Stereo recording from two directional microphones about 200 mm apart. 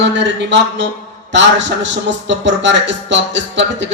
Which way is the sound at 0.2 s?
60° right (ahead or behind).